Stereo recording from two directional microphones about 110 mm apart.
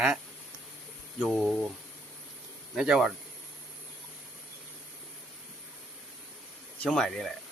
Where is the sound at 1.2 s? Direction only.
10° right (ahead or behind).